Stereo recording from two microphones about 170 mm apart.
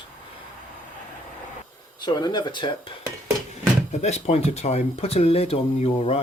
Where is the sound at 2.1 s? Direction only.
25° left (ahead or behind).